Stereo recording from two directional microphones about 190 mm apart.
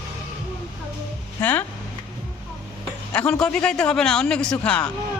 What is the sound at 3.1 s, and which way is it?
A man's voice, 5° left (ahead or behind).